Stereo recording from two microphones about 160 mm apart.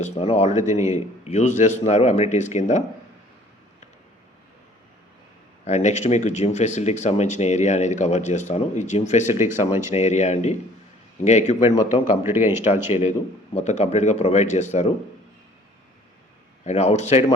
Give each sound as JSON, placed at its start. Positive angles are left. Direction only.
{"t": 0.0, "sound": "speech", "side_deg": 40}
{"t": 0.6, "sound": "speech", "side_deg": -20}
{"t": 0.9, "sound": "speech", "side_deg": 45}
{"t": 5.6, "sound": "speech", "side_deg": 45}
{"t": 9.3, "sound": "speech", "side_deg": -15}
{"t": 9.9, "sound": "speech", "side_deg": 45}
{"t": 12.2, "sound": "speech", "side_deg": -15}
{"t": 13.0, "sound": "speech", "side_deg": 45}
{"t": 16.6, "sound": "speech", "side_deg": 45}